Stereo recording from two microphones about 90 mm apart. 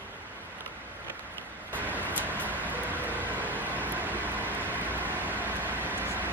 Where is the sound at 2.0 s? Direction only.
20° left (ahead or behind).